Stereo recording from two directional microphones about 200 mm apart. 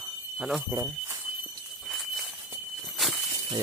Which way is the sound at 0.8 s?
15° right (ahead or behind).